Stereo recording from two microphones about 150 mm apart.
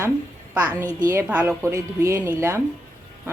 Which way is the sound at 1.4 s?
20° right (ahead or behind).